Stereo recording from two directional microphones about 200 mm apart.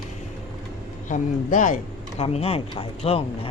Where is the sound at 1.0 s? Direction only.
40° left (ahead or behind).